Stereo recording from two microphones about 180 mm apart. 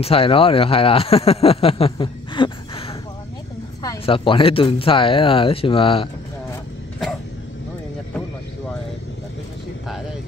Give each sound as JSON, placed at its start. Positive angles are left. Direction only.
{"t": 0.0, "sound": "speech", "side_deg": 30}
{"t": 4.0, "sound": "speech", "side_deg": 30}